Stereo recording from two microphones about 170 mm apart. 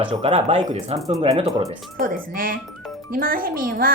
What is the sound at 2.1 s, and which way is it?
A child's voice, 55° right (ahead or behind).